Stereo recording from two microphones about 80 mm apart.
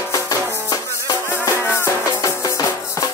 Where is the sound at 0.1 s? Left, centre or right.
Left.